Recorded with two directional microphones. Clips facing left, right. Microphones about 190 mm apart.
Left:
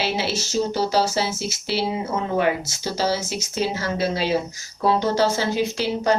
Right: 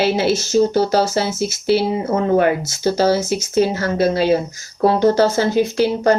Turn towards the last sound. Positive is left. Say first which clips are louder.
# right 6 dB
turn(degrees=-50)  # may be behind; listen again after turning